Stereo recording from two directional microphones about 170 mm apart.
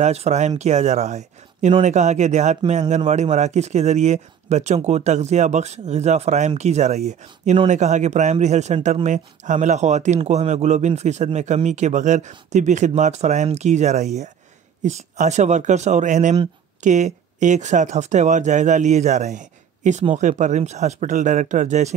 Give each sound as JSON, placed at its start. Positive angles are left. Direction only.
{"t": 0.0, "sound": "speech", "side_deg": -40}